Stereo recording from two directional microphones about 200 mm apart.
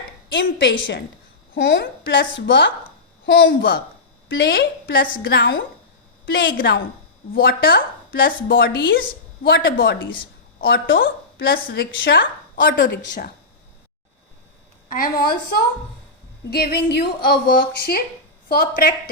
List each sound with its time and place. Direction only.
0.3 s a woman's voice: 65° left (ahead or behind)
4.3 s a woman's voice: 55° left (ahead or behind)
8.5 s a woman's voice: 65° left (ahead or behind)
9.0 s a woman's voice: 45° left (ahead or behind); by 12.7 s 65° left (ahead or behind)
13.1 s a woman's voice: 40° left (ahead or behind)
14.8 s a woman's voice: 45° left (ahead or behind)
16.5 s a woman's voice: 50° left (ahead or behind)